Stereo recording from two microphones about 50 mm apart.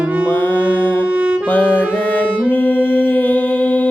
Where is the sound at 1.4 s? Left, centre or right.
Left.